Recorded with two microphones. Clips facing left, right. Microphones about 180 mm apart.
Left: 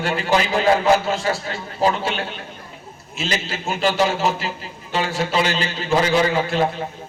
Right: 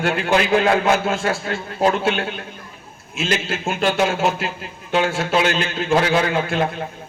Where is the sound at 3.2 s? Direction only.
55° right (ahead or behind).